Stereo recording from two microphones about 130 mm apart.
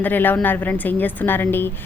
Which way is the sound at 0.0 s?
15° left (ahead or behind).